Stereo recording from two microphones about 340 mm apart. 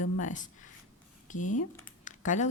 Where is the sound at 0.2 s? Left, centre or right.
Left.